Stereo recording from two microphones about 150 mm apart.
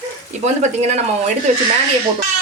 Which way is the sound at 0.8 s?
45° right (ahead or behind).